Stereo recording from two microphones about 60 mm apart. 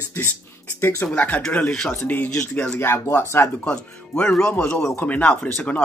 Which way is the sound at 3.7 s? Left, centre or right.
Left.